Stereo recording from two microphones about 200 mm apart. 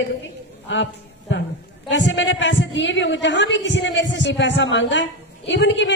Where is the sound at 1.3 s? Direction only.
65° left (ahead or behind).